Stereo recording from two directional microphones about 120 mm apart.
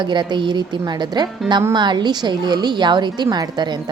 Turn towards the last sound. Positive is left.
turn(degrees=-35)  # may be behind; listen again after turning